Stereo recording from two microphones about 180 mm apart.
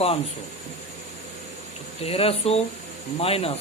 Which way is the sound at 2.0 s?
35° left (ahead or behind).